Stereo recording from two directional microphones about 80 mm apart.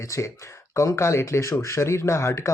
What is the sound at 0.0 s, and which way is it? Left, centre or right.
Speech, left.